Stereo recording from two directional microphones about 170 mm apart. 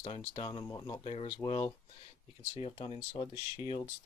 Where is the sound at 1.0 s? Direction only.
40° left (ahead or behind).